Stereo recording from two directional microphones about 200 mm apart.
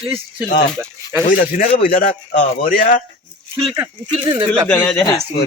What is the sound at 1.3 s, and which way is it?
Speech, 45° left (ahead or behind).